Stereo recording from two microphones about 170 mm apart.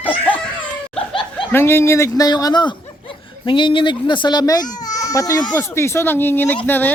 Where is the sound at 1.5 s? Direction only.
15° left (ahead or behind).